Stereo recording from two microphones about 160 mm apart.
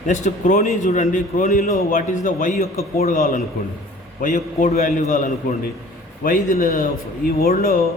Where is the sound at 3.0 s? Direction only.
70° left (ahead or behind).